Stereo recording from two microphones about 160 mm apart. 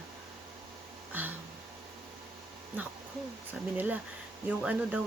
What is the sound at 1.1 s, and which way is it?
Speech, 10° right (ahead or behind).